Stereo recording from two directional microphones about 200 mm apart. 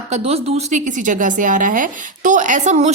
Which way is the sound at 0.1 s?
30° right (ahead or behind).